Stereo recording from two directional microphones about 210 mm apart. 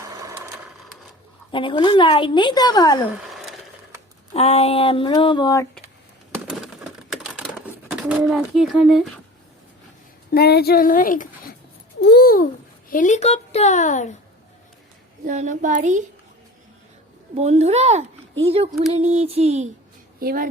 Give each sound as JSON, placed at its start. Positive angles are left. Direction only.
{"t": 0.0, "sound": "a sound", "side_deg": -15}
{"t": 1.5, "sound": "a woman's voice", "side_deg": 25}
{"t": 4.4, "sound": "a woman's voice", "side_deg": 30}
{"t": 6.3, "sound": "a sound", "side_deg": 0}
{"t": 7.9, "sound": "speech", "side_deg": -5}
{"t": 10.3, "sound": "a child's voice", "side_deg": 50}
{"t": 15.2, "sound": "a child's voice", "side_deg": -35}
{"t": 17.3, "sound": "a child's voice", "side_deg": -30}
{"t": 20.1, "sound": "speech", "side_deg": -45}